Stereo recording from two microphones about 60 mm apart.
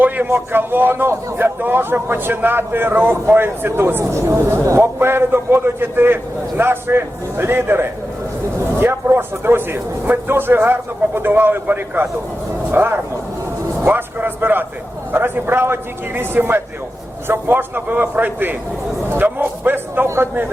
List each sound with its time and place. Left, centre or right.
0.0 s speech: right
4.8 s speech: right
13.8 s a sound: right
15.1 s speech: right